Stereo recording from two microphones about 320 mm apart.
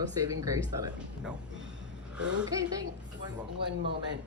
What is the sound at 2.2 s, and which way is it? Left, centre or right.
Speech, centre.